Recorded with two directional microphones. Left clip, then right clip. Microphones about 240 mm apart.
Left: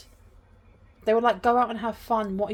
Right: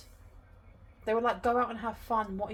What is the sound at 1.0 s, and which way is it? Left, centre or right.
Speech, left.